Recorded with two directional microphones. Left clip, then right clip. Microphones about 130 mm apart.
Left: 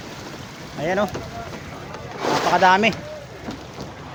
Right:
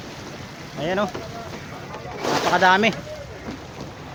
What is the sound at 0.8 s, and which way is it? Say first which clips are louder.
Speech: left 2 dB; 5° left (ahead or behind).